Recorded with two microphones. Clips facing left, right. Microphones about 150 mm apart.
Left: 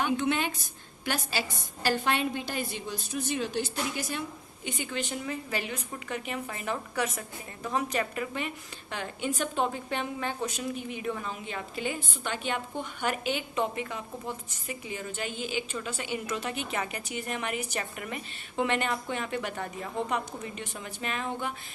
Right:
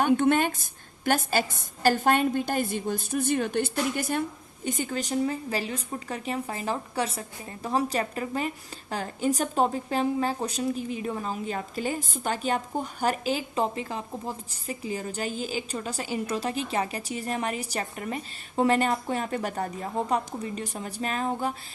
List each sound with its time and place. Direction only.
0.0 s a woman's voice: 50° right (ahead or behind)
4.6 s a woman's voice: 40° right (ahead or behind)